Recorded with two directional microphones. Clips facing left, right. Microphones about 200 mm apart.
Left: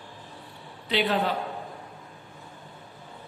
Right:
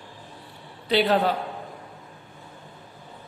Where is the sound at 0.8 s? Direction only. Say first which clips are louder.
Right 5 dB; 40° right (ahead or behind).